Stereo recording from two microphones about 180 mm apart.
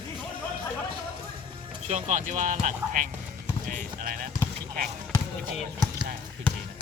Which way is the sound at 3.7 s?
50° right (ahead or behind).